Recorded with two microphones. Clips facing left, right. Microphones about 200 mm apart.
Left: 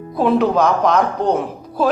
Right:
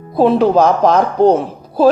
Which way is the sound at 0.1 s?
30° right (ahead or behind).